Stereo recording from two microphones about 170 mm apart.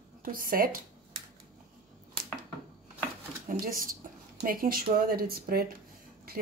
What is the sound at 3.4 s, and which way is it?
A woman's voice, 55° right (ahead or behind).